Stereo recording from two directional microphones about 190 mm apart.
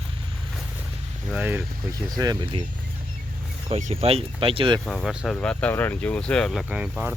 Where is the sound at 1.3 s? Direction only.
10° right (ahead or behind); by 2.6 s 25° right (ahead or behind).